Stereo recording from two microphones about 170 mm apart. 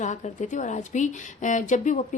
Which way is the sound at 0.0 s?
45° left (ahead or behind).